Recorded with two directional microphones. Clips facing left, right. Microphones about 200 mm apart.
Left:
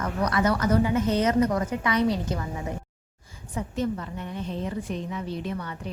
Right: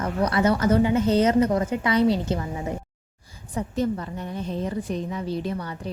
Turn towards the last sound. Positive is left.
turn(degrees=-35)  # may be behind; listen again after turning